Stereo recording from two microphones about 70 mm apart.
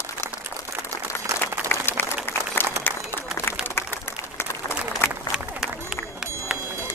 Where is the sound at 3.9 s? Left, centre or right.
Left.